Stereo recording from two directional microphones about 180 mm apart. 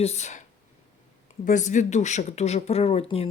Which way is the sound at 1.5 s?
45° left (ahead or behind).